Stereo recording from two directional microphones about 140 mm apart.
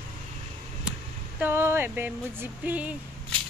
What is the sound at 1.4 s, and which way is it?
Speech, 15° right (ahead or behind).